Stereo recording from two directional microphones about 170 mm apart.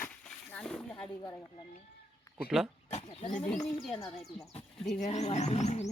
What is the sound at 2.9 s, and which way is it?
Speech, 40° left (ahead or behind).